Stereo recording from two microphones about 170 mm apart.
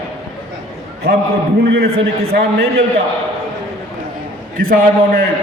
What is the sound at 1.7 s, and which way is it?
A man's voice, 65° right (ahead or behind).